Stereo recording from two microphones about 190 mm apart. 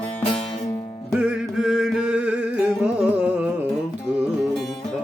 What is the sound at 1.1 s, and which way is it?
Music, 5° right (ahead or behind).